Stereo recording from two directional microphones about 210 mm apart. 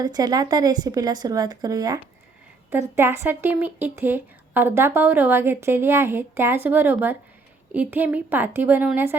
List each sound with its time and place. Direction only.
0.0 s a woman's voice: 20° right (ahead or behind)